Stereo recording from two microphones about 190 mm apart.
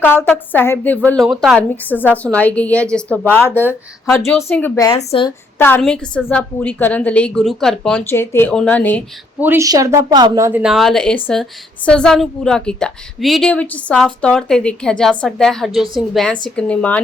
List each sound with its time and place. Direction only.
0.0 s a woman's voice: 10° left (ahead or behind)
4.9 s speech: 25° left (ahead or behind)
5.5 s a woman's voice: 10° left (ahead or behind)
9.4 s a woman's voice: 15° right (ahead or behind)
10.6 s a woman's voice: centre (ahead or behind)